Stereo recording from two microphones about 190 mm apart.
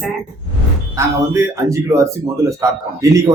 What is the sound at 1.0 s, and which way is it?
A man's voice, 15° right (ahead or behind).